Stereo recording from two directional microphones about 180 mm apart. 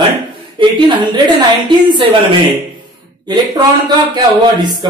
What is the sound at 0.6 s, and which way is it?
Speech, 25° right (ahead or behind).